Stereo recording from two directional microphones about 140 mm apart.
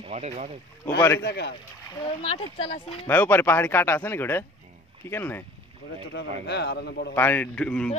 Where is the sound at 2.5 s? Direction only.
45° left (ahead or behind).